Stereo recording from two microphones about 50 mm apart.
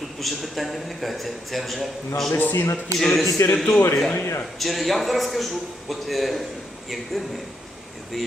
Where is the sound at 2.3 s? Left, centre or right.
Left.